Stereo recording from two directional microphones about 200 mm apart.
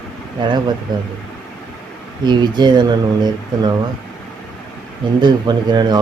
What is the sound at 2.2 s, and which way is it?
Speech, 20° right (ahead or behind).